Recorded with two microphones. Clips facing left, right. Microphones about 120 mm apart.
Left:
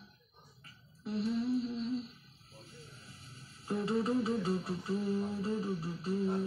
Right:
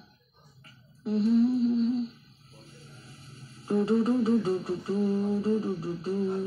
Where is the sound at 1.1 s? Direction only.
45° right (ahead or behind).